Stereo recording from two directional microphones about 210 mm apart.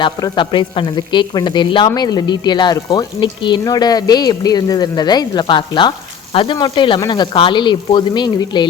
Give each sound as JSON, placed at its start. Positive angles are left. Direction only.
{"t": 0.0, "sound": "a woman's voice", "side_deg": 25}